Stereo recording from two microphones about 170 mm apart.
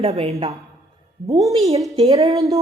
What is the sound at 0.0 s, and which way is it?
Speech, 35° right (ahead or behind).